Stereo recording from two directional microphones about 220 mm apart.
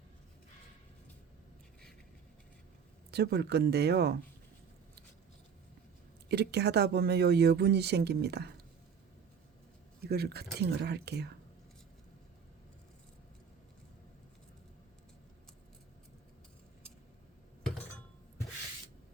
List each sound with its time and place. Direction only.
3.1 s speech: 45° right (ahead or behind)
6.2 s speech: 50° right (ahead or behind)
10.0 s speech: 45° right (ahead or behind)